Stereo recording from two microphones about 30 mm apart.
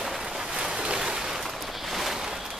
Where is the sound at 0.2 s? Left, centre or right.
Centre.